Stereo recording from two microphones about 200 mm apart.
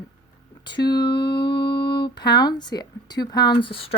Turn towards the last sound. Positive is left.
turn(degrees=25)  # may be behind; listen again after turning